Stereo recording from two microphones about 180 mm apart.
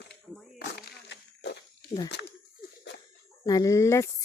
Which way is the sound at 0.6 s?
65° left (ahead or behind).